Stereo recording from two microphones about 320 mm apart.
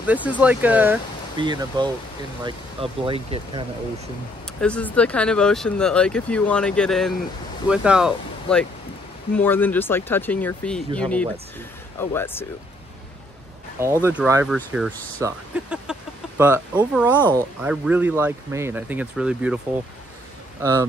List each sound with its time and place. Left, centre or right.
0.0 s speech: centre
4.6 s speech: centre
14.0 s speech: centre
17.1 s speech: centre
17.6 s speech: centre